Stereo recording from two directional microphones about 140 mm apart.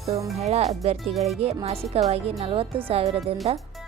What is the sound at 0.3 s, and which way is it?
Speech, 50° right (ahead or behind).